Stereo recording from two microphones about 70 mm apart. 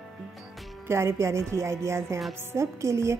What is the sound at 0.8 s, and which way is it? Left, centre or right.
A woman's voice, right.